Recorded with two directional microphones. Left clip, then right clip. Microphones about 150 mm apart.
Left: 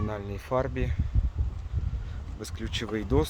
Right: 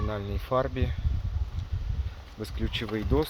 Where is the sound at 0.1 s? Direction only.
20° left (ahead or behind).